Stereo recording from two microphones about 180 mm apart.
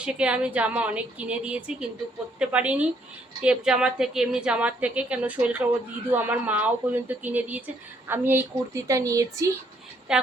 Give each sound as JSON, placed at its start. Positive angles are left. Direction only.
{"t": 0.0, "sound": "a woman's voice", "side_deg": -5}
{"t": 10.1, "sound": "a woman's voice", "side_deg": -5}